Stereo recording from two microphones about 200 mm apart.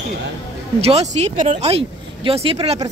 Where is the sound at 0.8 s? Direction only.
30° right (ahead or behind).